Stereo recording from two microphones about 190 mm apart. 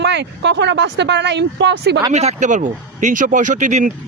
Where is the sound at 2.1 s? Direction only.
35° right (ahead or behind).